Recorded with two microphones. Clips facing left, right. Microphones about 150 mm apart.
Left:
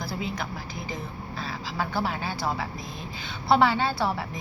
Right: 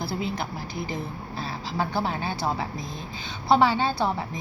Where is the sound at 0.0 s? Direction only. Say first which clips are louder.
Right 3 dB; 30° right (ahead or behind).